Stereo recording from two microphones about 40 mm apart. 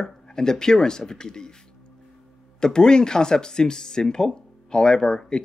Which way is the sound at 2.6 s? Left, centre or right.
Centre.